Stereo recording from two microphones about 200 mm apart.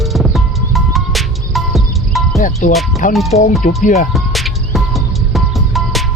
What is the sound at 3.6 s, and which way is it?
Speech, 40° left (ahead or behind).